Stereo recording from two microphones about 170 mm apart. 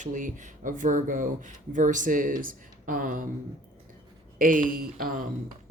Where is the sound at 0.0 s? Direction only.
50° right (ahead or behind).